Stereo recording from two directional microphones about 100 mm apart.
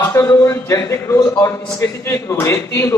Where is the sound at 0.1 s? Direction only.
30° left (ahead or behind).